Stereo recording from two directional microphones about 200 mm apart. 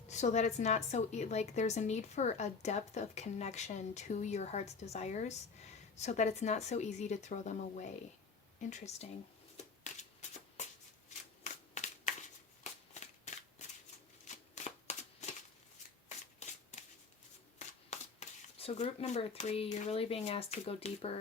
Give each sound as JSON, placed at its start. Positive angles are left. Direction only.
{"t": 0.1, "sound": "speech", "side_deg": 35}
{"t": 9.8, "sound": "shuffling cards", "side_deg": 35}
{"t": 16.4, "sound": "shuffling cards", "side_deg": 35}
{"t": 17.9, "sound": "speech", "side_deg": 30}